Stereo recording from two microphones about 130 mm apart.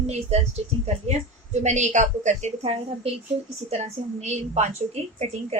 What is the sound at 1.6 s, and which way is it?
A woman's voice, 65° right (ahead or behind).